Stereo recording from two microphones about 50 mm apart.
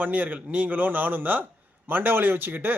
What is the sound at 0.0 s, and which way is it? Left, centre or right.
A man's voice, right.